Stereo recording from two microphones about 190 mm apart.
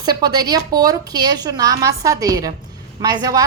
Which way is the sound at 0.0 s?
20° right (ahead or behind).